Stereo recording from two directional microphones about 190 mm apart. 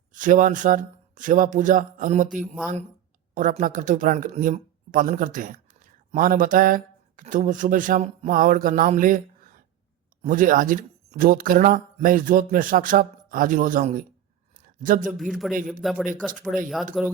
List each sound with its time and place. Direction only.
0.1 s speech: 45° right (ahead or behind)
15.2 s speech: centre (ahead or behind)